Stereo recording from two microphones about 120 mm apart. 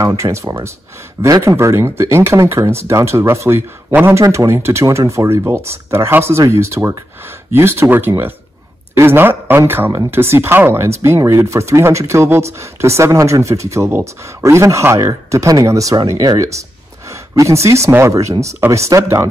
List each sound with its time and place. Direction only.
0.0 s speech: 25° right (ahead or behind)